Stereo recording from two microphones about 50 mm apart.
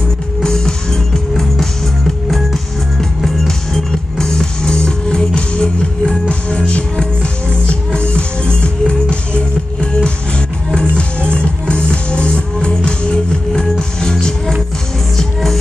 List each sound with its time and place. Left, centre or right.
0.4 s music: centre
2.2 s music: centre; by 7.1 s left
8.1 s music: left